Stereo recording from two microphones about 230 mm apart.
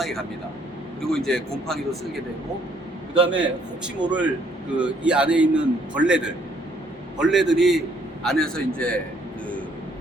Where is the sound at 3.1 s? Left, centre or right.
Right.